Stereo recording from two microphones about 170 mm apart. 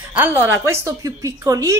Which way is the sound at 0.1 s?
10° right (ahead or behind).